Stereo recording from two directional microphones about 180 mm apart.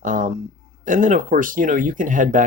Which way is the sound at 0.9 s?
45° right (ahead or behind).